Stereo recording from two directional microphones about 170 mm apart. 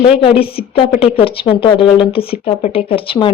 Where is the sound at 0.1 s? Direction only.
30° left (ahead or behind).